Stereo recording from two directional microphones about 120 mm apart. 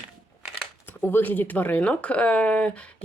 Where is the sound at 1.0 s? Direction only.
15° left (ahead or behind).